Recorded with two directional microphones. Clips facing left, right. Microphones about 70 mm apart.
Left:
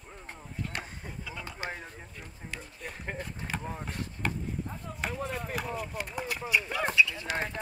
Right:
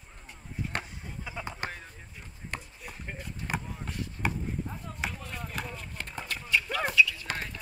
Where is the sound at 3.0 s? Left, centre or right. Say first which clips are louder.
Left 5 dB; left.